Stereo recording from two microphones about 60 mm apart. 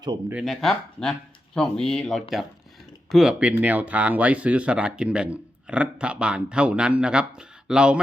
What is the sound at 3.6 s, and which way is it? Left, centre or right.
Speech, right.